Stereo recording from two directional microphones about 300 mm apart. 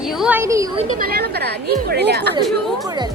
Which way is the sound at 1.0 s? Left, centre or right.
Right.